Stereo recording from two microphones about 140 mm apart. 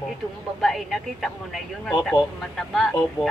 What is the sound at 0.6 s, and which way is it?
A woman's voice, centre (ahead or behind).